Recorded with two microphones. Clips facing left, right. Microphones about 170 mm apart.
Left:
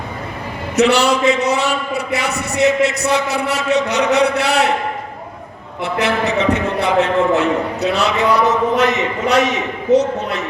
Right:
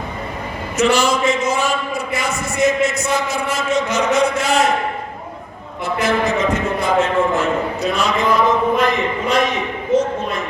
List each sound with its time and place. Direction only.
0.8 s a man's voice: 70° left (ahead or behind)
5.8 s a man's voice: 70° left (ahead or behind)